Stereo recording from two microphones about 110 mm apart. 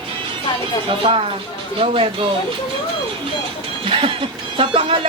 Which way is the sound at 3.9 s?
55° right (ahead or behind).